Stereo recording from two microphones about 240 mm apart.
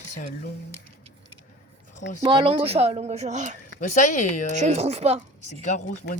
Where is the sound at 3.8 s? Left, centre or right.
Left.